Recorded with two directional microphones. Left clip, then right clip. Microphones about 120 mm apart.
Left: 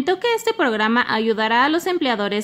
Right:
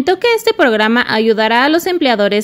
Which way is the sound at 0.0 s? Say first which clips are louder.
Right 7 dB; 25° right (ahead or behind).